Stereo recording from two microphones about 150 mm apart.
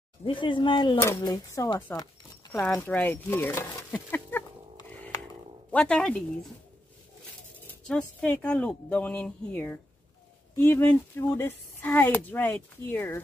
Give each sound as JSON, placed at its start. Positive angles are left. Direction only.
{"t": 0.2, "sound": "speech", "side_deg": 35}
{"t": 5.7, "sound": "speech", "side_deg": 5}
{"t": 7.8, "sound": "speech", "side_deg": 5}